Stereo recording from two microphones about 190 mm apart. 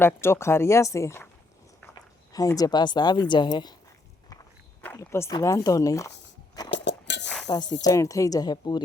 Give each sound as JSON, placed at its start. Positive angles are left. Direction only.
{"t": 0.0, "sound": "speech", "side_deg": 15}
{"t": 4.8, "sound": "speech", "side_deg": 10}
{"t": 6.7, "sound": "a sound", "side_deg": 70}
{"t": 7.4, "sound": "a woman's voice", "side_deg": 20}